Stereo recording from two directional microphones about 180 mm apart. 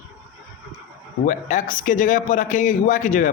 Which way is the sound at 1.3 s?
45° left (ahead or behind).